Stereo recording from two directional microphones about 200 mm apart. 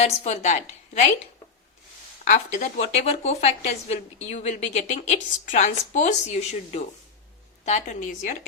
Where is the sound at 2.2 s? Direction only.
35° left (ahead or behind).